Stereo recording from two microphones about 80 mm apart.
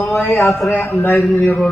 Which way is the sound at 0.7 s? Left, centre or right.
Left.